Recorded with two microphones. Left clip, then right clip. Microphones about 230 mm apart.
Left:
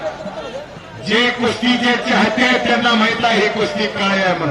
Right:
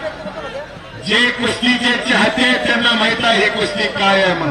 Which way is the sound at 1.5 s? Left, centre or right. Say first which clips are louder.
Even; right.